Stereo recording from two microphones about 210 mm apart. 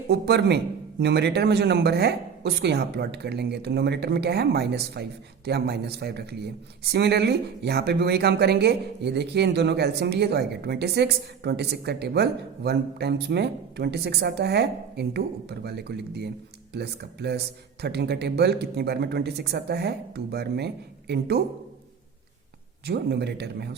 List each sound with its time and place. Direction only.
0.1 s a man's voice: 55° right (ahead or behind)
22.9 s a man's voice: 50° right (ahead or behind)